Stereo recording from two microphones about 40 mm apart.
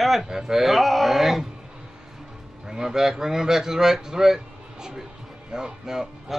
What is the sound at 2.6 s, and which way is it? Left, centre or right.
Speech, centre.